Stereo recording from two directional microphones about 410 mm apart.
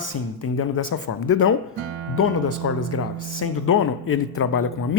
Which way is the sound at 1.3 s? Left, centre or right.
Left.